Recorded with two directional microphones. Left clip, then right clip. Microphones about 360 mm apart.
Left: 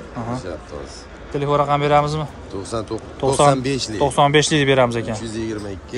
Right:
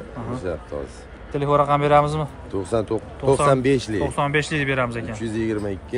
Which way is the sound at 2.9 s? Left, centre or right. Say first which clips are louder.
Left 4 dB; right.